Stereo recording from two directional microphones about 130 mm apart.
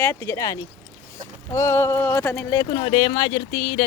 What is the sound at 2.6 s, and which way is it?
Speech, 35° left (ahead or behind).